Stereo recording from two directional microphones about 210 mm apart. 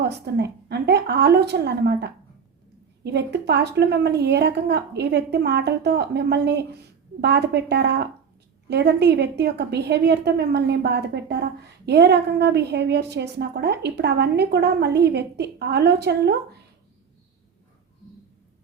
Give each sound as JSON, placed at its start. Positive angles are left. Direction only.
{"t": 0.0, "sound": "a woman's voice", "side_deg": -55}